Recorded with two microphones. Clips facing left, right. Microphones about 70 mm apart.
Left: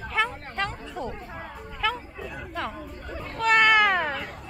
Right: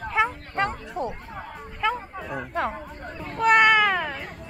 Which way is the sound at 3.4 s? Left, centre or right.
Centre.